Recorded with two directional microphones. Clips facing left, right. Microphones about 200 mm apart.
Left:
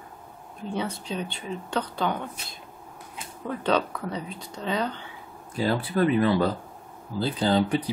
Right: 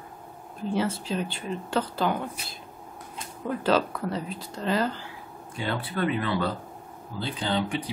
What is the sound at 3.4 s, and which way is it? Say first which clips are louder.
Speech: right 1 dB; 5° right (ahead or behind).